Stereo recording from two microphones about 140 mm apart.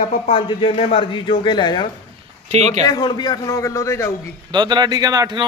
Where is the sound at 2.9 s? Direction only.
30° left (ahead or behind).